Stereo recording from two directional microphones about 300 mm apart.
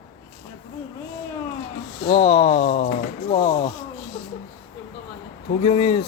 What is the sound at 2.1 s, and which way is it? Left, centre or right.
A man's voice, centre.